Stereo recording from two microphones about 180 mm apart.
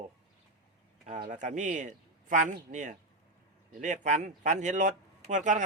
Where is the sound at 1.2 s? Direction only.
45° right (ahead or behind).